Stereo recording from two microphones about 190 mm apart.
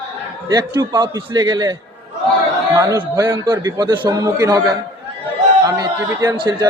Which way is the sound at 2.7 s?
20° right (ahead or behind).